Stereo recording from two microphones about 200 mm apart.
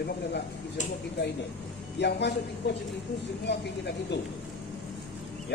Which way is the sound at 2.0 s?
60° left (ahead or behind).